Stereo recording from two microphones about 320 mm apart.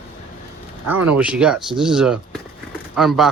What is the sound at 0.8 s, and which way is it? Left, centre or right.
Speech, centre.